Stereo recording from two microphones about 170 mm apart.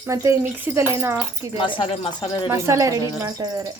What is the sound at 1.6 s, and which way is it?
Speech, 30° left (ahead or behind).